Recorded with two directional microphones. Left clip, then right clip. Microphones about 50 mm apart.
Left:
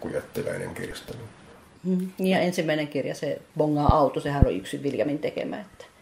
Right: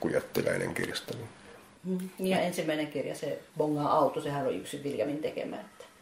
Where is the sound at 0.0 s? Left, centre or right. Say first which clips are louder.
Right 1 dB; right.